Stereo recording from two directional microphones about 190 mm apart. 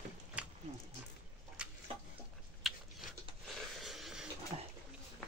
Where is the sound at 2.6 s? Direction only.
Centre (ahead or behind).